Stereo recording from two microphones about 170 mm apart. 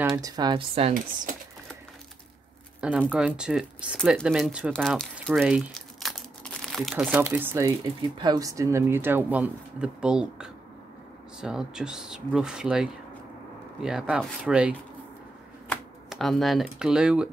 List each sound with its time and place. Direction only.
0.0 s speech: 20° right (ahead or behind)
3.1 s speech: 5° right (ahead or behind)
16.1 s speech: centre (ahead or behind)